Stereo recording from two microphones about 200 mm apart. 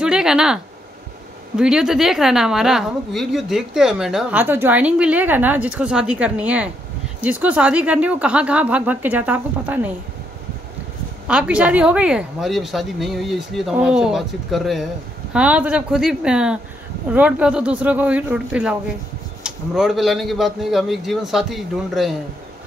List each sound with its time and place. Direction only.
0.0 s a sound: 5° right (ahead or behind)
1.6 s a woman's voice: 5° right (ahead or behind)
11.2 s a woman's voice: 5° right (ahead or behind)